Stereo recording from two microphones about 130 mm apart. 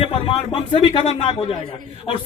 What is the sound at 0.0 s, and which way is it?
A man's voice, 50° left (ahead or behind).